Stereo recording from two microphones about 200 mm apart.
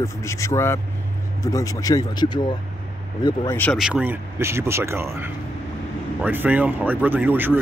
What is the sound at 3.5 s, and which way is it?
Speech, 10° left (ahead or behind).